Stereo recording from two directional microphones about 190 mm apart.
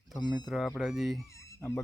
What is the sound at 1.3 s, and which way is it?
Fowl, 15° left (ahead or behind).